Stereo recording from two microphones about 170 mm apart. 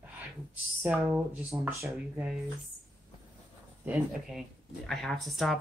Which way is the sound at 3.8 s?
5° right (ahead or behind).